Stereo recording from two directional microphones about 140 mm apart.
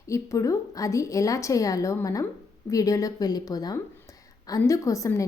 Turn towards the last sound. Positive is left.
turn(degrees=25)  # may be behind; listen again after turning